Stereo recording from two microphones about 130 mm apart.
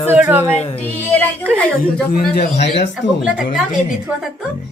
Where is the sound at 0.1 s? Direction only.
15° right (ahead or behind).